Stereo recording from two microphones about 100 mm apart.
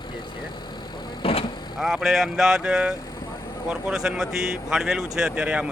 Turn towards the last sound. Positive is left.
turn(degrees=-10)  # may be behind; listen again after turning